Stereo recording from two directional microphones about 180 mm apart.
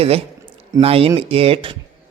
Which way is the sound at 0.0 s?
35° right (ahead or behind).